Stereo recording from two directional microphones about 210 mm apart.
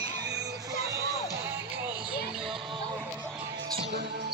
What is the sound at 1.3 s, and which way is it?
Music, 10° right (ahead or behind).